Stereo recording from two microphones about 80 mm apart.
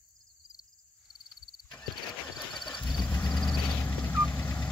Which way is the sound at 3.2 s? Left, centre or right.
Left.